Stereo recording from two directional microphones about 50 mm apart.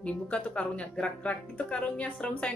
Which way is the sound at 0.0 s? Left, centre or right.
Left.